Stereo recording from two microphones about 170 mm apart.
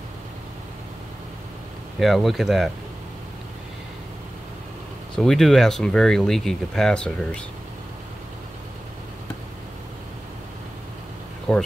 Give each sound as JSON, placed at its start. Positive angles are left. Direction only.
{"t": 2.0, "sound": "speech", "side_deg": 0}
{"t": 5.1, "sound": "speech", "side_deg": 5}
{"t": 11.5, "sound": "speech", "side_deg": 5}